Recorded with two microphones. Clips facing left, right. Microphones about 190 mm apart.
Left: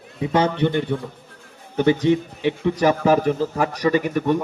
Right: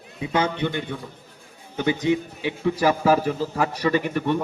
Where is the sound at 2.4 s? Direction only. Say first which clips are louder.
Left 3 dB; 20° left (ahead or behind).